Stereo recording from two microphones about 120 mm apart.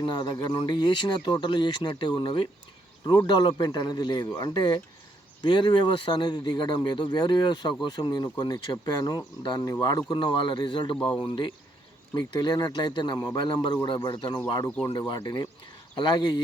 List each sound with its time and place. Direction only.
0.0 s speech: 40° left (ahead or behind)